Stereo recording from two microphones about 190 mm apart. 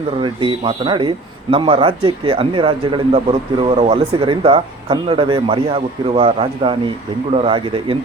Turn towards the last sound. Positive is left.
turn(degrees=-25)  # may be behind; listen again after turning